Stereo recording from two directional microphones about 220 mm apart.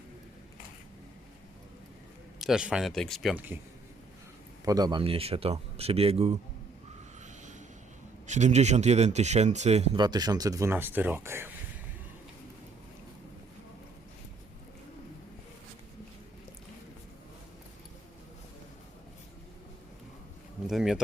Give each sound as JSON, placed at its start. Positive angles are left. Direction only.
{"t": 2.4, "sound": "speech", "side_deg": -5}
{"t": 4.6, "sound": "speech", "side_deg": -15}
{"t": 8.3, "sound": "speech", "side_deg": -30}
{"t": 20.7, "sound": "speech", "side_deg": 0}